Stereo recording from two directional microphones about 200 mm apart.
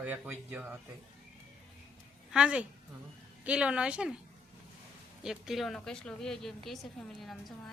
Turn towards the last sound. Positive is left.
turn(degrees=0)  # may be behind; listen again after turning